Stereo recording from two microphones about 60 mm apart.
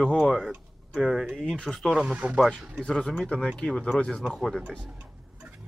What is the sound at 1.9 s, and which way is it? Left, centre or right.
Speech, centre.